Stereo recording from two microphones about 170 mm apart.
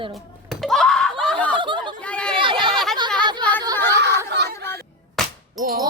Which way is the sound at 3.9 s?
85° right.